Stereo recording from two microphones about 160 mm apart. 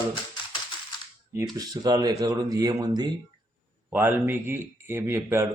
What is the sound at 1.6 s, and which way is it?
Speech, 25° right (ahead or behind).